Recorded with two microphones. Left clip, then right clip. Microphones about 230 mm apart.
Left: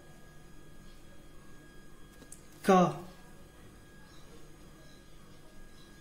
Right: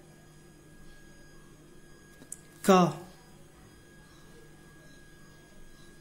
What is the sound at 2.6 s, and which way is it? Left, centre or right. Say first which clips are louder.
Speech: right 2 dB; right.